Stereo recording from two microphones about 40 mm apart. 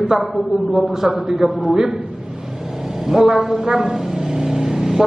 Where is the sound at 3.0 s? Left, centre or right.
Centre.